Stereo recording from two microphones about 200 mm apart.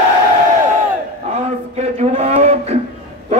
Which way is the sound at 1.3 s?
35° right (ahead or behind).